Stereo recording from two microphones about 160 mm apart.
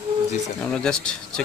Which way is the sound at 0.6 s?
5° left (ahead or behind).